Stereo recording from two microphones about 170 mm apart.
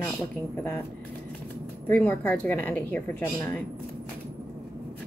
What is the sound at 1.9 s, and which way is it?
A woman's voice, 10° left (ahead or behind).